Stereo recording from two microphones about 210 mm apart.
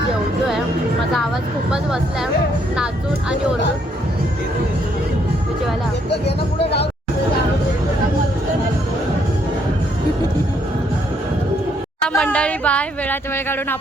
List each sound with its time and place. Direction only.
1.7 s speech: centre (ahead or behind)
6.1 s speech: 55° left (ahead or behind)
12.0 s speech: 5° left (ahead or behind)